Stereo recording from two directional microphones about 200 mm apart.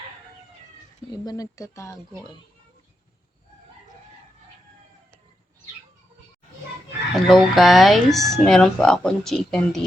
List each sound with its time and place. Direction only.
1.1 s speech: 20° left (ahead or behind)
7.2 s speech: centre (ahead or behind)